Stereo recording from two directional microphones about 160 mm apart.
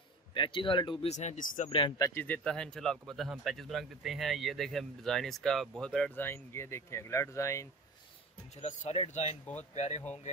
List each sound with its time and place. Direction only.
0.3 s speech: 30° left (ahead or behind)
1.1 s speech: 45° left (ahead or behind)
1.7 s speech: 30° left (ahead or behind)
8.5 s speech: 45° left (ahead or behind)